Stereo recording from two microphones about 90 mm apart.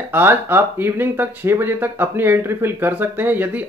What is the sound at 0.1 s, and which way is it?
Speech, 25° right (ahead or behind).